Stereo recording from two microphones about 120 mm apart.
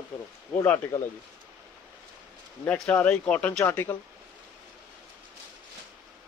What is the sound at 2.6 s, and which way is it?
A man's voice, 5° left (ahead or behind).